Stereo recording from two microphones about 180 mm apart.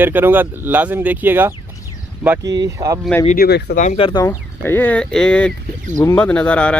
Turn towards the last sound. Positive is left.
turn(degrees=5)  # may be behind; listen again after turning